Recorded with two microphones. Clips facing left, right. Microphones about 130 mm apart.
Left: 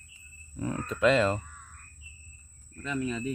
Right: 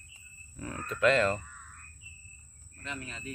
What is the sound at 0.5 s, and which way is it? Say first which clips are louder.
Speech: left 6 dB; 15° left (ahead or behind).